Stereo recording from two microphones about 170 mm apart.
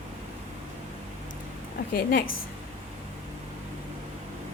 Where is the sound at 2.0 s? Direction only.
60° left (ahead or behind).